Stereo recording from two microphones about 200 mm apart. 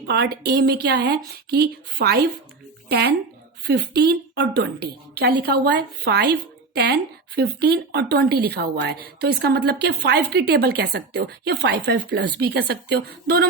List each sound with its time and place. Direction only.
0.1 s a woman's voice: 55° right (ahead or behind)